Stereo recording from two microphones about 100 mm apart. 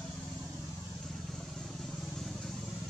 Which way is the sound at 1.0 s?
5° left (ahead or behind).